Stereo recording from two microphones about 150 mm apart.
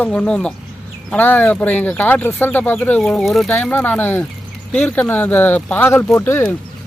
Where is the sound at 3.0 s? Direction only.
5° left (ahead or behind).